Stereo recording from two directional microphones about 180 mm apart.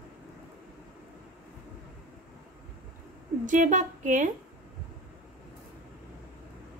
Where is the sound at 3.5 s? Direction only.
45° right (ahead or behind).